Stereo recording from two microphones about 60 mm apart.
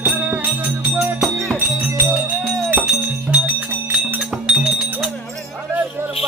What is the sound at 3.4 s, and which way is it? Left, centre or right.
Music, right.